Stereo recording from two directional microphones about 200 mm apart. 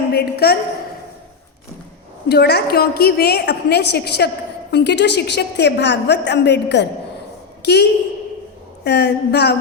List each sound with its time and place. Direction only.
0.1 s a woman's voice: 50° left (ahead or behind)
2.3 s a woman's voice: 55° left (ahead or behind)